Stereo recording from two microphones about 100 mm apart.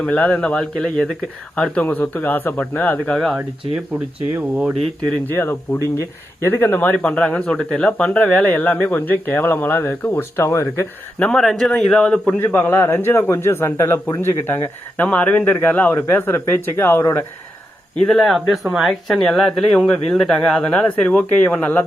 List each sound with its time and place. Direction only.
0.0 s speech: 15° left (ahead or behind)
4.4 s speech: 15° right (ahead or behind)
5.1 s speech: 20° left (ahead or behind)
11.2 s speech: 5° left (ahead or behind)
12.4 s speech: 20° left (ahead or behind)
18.0 s speech: 5° left (ahead or behind)